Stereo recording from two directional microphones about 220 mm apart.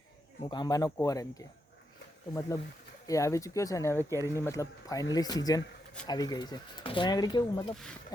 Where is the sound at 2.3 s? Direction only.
15° left (ahead or behind).